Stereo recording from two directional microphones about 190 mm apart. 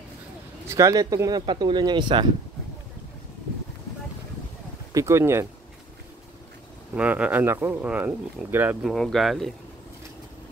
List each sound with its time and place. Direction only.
0.7 s speech: 15° right (ahead or behind)
4.9 s speech: 15° right (ahead or behind)
7.0 s speech: 5° right (ahead or behind)
8.9 s speech: centre (ahead or behind)